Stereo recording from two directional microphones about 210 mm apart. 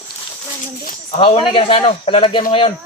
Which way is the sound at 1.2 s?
25° left (ahead or behind).